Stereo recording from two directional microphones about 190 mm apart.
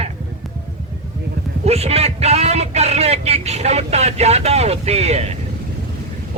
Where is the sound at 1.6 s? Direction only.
35° right (ahead or behind).